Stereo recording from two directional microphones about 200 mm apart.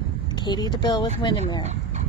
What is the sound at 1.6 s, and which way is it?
Chicken, 35° right (ahead or behind).